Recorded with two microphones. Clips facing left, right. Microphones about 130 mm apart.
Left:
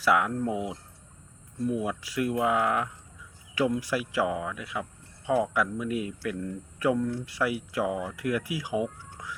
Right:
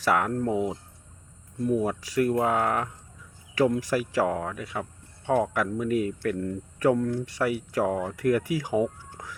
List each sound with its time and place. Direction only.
0.0 s speech: 40° right (ahead or behind)